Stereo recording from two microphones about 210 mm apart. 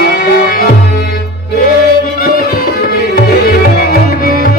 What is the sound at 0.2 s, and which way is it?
Music, 45° left (ahead or behind).